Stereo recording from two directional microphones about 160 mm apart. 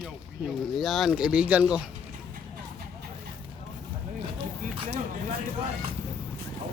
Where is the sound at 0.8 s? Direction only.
Centre (ahead or behind).